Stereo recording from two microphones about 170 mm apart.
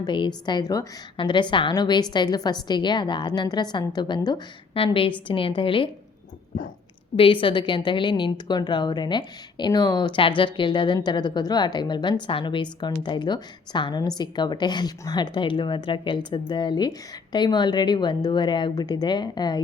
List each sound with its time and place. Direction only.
0.0 s a woman's voice: 25° left (ahead or behind)
7.4 s a woman's voice: 30° left (ahead or behind)